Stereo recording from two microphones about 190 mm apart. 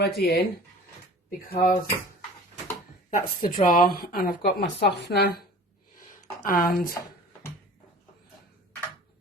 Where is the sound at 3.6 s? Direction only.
45° left (ahead or behind).